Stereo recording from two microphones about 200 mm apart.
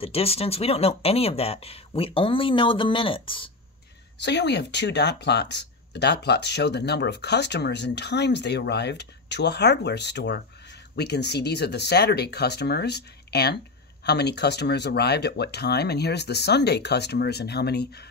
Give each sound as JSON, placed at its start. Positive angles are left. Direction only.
{"t": 0.0, "sound": "speech", "side_deg": 30}
{"t": 4.2, "sound": "speech", "side_deg": 60}